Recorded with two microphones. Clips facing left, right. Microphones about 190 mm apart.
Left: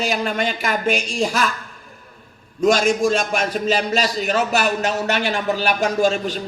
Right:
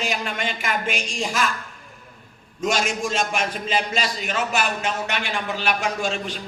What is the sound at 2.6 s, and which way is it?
A man's voice, 40° left (ahead or behind).